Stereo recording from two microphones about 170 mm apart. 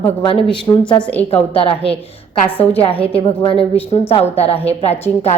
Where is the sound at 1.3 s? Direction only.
35° left (ahead or behind).